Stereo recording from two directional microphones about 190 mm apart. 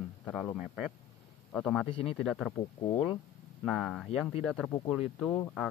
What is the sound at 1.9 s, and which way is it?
Speech, 30° left (ahead or behind).